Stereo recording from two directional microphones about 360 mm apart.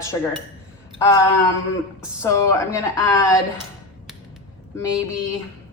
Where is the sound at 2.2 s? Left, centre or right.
Centre.